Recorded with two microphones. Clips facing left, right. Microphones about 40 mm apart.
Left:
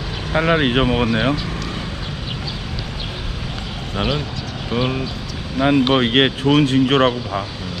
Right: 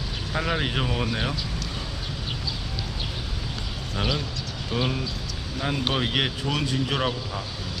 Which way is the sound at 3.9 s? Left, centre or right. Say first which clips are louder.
Left 6 dB; left.